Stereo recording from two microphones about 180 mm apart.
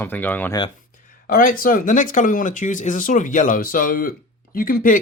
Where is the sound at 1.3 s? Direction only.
50° left (ahead or behind).